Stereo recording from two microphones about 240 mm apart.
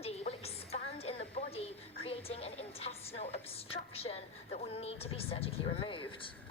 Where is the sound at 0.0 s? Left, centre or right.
Left.